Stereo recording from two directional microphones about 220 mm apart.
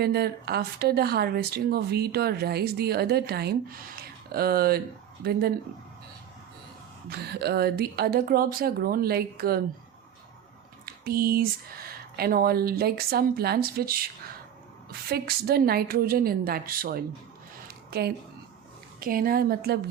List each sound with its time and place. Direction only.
0.0 s speech: 45° right (ahead or behind)
7.1 s speech: 45° right (ahead or behind)
10.8 s speech: 45° right (ahead or behind)
15.1 s speech: 45° right (ahead or behind)